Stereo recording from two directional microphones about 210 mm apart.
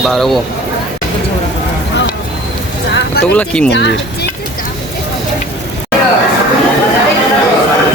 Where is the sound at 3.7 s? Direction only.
55° left (ahead or behind).